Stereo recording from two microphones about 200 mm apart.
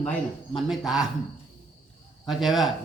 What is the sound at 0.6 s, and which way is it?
Speech, centre (ahead or behind).